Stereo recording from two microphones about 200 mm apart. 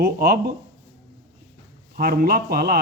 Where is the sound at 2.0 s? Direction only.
50° right (ahead or behind).